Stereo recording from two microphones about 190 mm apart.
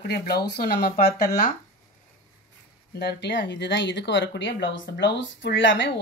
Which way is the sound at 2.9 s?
60° left (ahead or behind).